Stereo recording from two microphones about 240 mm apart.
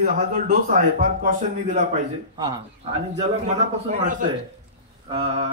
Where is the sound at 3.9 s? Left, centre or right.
Right.